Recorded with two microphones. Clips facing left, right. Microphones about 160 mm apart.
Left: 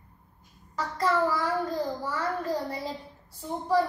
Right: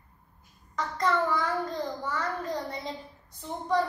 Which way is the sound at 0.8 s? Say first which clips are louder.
Left 1 dB; 5° left (ahead or behind).